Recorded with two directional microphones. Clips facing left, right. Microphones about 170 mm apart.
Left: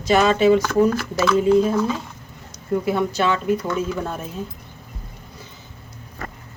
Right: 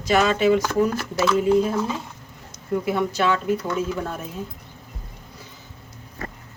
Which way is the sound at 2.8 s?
30° left (ahead or behind).